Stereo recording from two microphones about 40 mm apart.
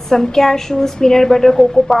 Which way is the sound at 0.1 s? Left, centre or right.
Centre.